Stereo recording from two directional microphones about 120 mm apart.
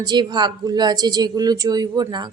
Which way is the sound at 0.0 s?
35° right (ahead or behind).